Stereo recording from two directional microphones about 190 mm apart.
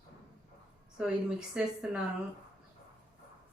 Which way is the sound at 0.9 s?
5° right (ahead or behind).